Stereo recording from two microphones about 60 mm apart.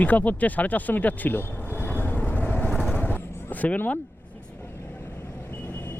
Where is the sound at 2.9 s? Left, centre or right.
Left.